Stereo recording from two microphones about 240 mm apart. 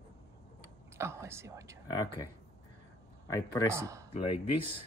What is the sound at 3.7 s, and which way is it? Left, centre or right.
Speech, centre.